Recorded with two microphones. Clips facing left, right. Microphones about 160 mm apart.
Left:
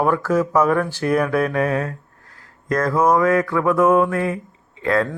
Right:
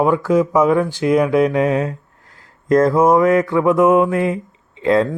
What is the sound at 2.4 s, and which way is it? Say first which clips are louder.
Mantra: right 8 dB; 25° right (ahead or behind).